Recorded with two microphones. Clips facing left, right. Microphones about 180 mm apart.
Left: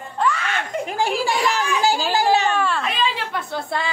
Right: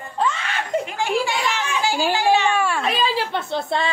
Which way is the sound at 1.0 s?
35° left (ahead or behind).